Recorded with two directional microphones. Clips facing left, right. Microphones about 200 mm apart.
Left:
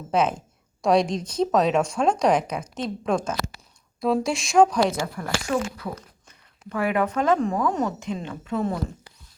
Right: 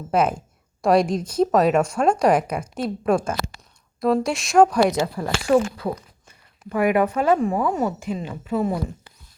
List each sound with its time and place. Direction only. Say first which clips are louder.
0.1 s a woman's voice: right 2 dB; 10° right (ahead or behind)
5.1 s speech: right 7 dB; 35° right (ahead or behind)
6.2 s speech: right 3 dB; 10° right (ahead or behind)